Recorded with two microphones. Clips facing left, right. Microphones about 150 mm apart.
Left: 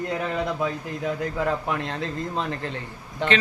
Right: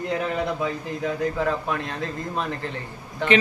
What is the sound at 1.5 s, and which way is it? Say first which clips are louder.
Speech: even; 20° left (ahead or behind).